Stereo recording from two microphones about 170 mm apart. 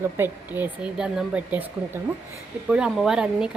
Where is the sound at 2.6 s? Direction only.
5° right (ahead or behind).